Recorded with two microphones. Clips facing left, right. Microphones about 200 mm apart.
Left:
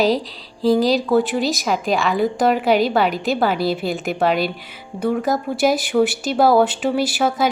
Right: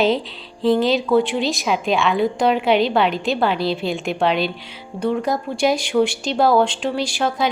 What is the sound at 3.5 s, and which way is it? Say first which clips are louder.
Speech: left 1 dB; 45° left (ahead or behind).